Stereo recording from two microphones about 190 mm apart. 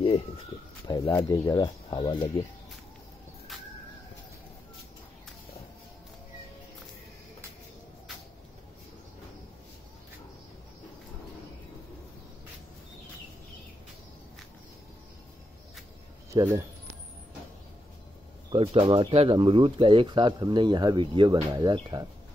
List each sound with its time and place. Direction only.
0.8 s speech: 20° left (ahead or behind)
16.3 s speech: 20° right (ahead or behind)
18.5 s speech: 30° right (ahead or behind)